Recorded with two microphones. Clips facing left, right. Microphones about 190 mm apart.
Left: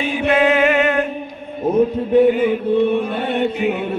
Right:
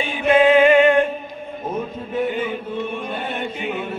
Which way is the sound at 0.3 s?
5° left (ahead or behind).